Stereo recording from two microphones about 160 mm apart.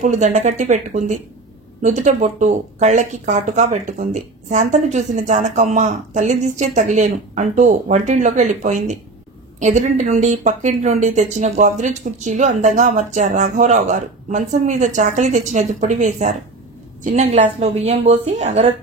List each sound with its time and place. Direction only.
0.0 s a woman's voice: 50° right (ahead or behind)